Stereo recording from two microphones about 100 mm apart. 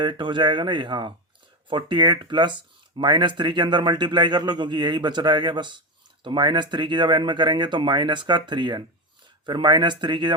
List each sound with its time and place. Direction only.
0.0 s speech: 50° right (ahead or behind)